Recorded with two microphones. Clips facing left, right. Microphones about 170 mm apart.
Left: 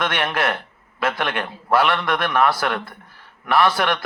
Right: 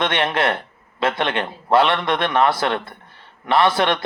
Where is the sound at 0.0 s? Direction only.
25° right (ahead or behind).